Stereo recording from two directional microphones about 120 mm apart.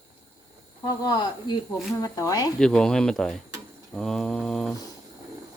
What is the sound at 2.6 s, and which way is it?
Mantra, 5° left (ahead or behind).